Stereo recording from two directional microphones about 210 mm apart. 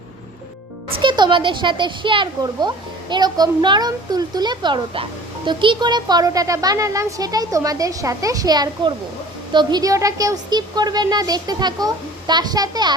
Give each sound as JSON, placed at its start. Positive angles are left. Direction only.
{"t": 0.9, "sound": "speech", "side_deg": -20}